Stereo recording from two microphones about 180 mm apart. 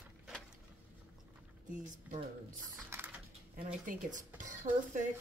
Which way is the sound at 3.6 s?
45° right (ahead or behind).